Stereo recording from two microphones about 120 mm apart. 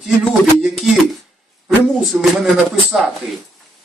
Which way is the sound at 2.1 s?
15° right (ahead or behind).